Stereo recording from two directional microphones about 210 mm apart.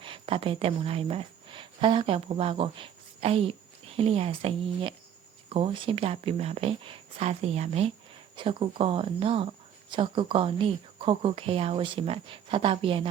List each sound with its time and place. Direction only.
0.0 s speech: 25° right (ahead or behind)